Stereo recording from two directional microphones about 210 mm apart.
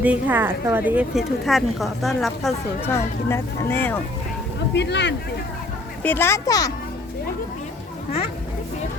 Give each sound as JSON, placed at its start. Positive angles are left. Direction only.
{"t": 0.0, "sound": "a woman's voice", "side_deg": -10}
{"t": 2.9, "sound": "speech", "side_deg": 10}
{"t": 4.7, "sound": "speech", "side_deg": 55}
{"t": 6.0, "sound": "speech", "side_deg": 10}